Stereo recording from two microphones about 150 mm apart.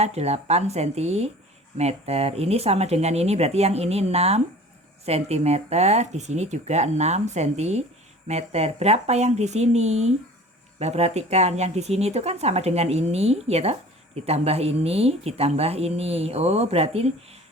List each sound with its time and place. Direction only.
0.0 s speech: 45° right (ahead or behind)